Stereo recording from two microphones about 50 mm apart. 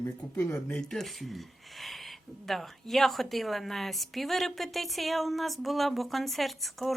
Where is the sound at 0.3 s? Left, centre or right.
Left.